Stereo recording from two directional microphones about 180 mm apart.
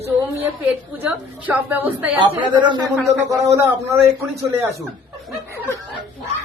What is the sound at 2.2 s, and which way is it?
A woman's voice, 25° right (ahead or behind).